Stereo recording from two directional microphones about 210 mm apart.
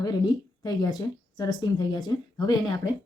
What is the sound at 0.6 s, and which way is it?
Speech, 20° left (ahead or behind).